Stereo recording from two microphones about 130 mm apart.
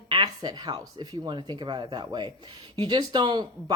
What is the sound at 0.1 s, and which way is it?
Speech, 35° right (ahead or behind).